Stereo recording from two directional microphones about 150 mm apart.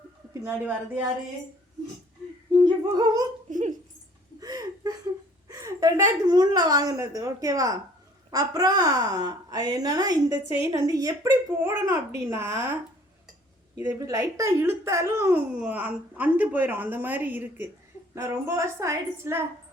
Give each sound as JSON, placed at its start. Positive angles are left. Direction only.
{"t": 0.4, "sound": "a woman's voice", "side_deg": -10}
{"t": 2.9, "sound": "a woman's voice", "side_deg": -25}
{"t": 3.5, "sound": "dog", "side_deg": -55}
{"t": 4.4, "sound": "a sound", "side_deg": -25}
{"t": 5.5, "sound": "a woman's voice", "side_deg": -20}
{"t": 13.7, "sound": "a woman's voice", "side_deg": -20}